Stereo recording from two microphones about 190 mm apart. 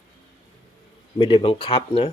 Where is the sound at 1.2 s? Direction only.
25° left (ahead or behind).